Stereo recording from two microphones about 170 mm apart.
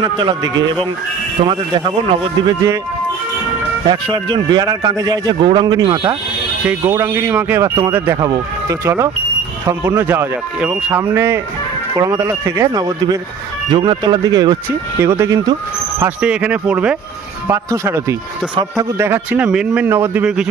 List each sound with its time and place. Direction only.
0.0 s a man's voice: 25° right (ahead or behind)
3.9 s a man's voice: 25° right (ahead or behind)
16.0 s speech: 5° right (ahead or behind)